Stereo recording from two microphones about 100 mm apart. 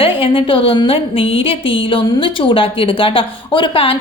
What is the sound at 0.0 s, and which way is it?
A woman's voice, 65° left (ahead or behind).